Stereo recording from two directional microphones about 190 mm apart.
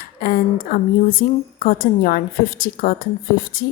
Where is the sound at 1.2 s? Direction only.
55° left (ahead or behind).